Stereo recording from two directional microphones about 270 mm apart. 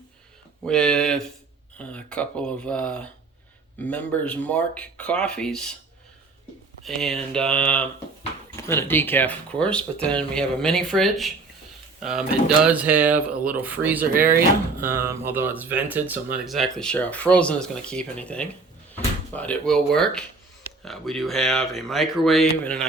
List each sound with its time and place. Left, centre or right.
0.6 s speech: centre
6.8 s speech: centre
14.0 s speech: right
14.3 s speech: centre